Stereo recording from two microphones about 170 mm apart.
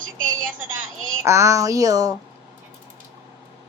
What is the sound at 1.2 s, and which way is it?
Speech, 15° right (ahead or behind).